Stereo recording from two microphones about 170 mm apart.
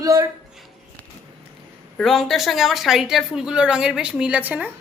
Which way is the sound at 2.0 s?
Centre (ahead or behind).